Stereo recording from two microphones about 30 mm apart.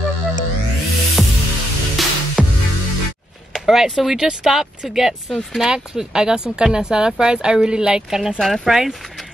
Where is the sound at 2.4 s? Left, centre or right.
Centre.